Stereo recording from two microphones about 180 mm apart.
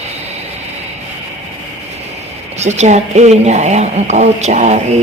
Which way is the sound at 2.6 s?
40° right (ahead or behind).